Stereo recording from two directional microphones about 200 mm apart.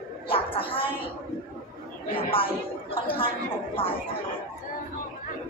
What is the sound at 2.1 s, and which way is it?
A woman's voice, 25° left (ahead or behind).